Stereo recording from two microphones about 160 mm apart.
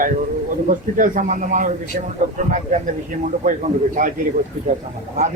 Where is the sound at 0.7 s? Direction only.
55° right (ahead or behind).